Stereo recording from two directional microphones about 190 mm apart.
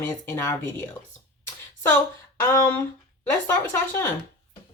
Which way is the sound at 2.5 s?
15° left (ahead or behind).